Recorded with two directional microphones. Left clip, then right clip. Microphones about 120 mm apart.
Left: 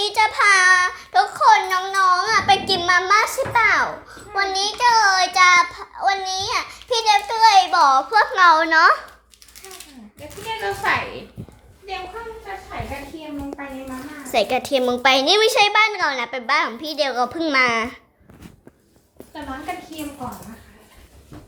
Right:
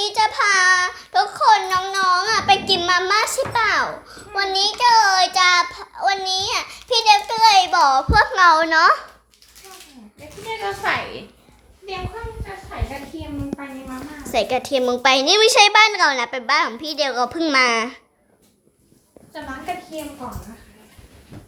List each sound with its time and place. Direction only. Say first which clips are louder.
0.0 s child singing: left 1 dB; centre (ahead or behind)
10.5 s a sound: even; 5° left (ahead or behind)
10.8 s child singing: left 1 dB; 10° right (ahead or behind)
14.3 s a woman's voice: left 1 dB; 5° left (ahead or behind)